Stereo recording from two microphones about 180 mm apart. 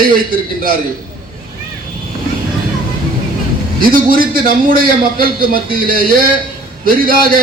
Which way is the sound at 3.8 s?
55° right (ahead or behind).